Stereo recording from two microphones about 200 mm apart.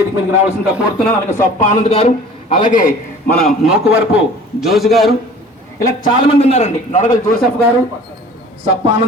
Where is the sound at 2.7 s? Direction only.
40° left (ahead or behind).